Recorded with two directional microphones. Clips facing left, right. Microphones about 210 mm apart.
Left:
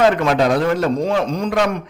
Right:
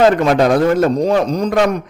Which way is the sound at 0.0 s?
40° right (ahead or behind).